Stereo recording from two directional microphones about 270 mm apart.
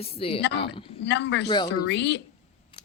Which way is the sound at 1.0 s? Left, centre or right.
Left.